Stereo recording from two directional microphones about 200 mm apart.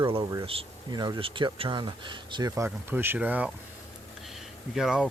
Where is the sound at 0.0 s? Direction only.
25° right (ahead or behind).